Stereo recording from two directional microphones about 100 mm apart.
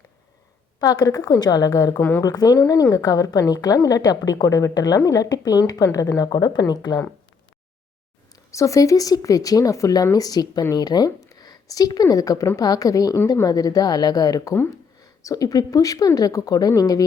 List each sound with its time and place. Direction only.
0.8 s a woman's voice: 40° left (ahead or behind)
2.0 s speech: 20° left (ahead or behind)
2.2 s a woman's voice: 40° left (ahead or behind)
8.4 s a woman's voice: 30° left (ahead or behind)